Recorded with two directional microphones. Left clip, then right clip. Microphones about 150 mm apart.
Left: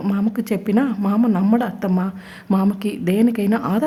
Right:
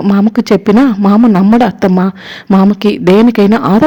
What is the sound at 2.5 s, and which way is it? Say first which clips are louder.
Speech: right 11 dB; 30° right (ahead or behind).